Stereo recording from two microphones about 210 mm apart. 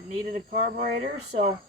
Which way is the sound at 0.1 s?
35° right (ahead or behind).